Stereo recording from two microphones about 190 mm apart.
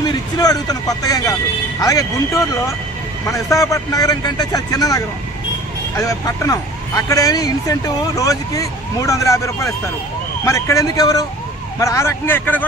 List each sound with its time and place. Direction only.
0.4 s a man's voice: 20° left (ahead or behind)